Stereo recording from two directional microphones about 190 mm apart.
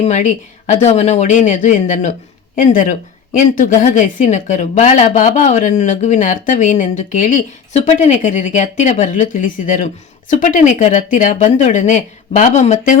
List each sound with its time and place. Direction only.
0.0 s a woman's voice: 40° left (ahead or behind)